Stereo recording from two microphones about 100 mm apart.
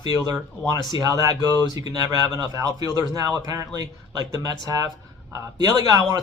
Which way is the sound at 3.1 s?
35° right (ahead or behind).